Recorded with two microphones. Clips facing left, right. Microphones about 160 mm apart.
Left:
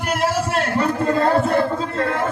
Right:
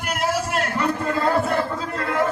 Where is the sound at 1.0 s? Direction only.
50° left (ahead or behind).